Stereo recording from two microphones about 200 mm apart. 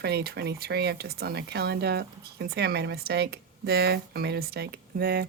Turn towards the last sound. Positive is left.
turn(degrees=-50)  # may be behind; listen again after turning